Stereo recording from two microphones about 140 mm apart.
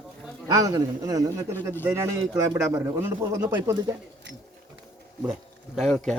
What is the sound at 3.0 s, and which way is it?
Speech, 15° right (ahead or behind).